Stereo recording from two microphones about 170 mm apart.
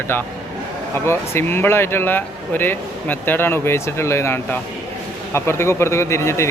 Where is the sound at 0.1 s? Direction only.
10° left (ahead or behind).